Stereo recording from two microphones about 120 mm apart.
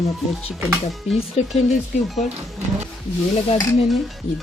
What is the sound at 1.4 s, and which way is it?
Speech, 65° left (ahead or behind).